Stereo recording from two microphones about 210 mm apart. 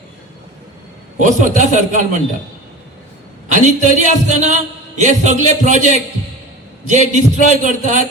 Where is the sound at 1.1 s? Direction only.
35° right (ahead or behind).